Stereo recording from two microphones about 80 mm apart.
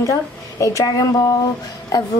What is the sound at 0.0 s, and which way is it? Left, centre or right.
A woman's voice, left.